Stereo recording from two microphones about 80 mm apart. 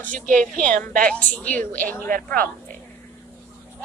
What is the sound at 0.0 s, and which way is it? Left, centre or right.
A woman's voice, centre.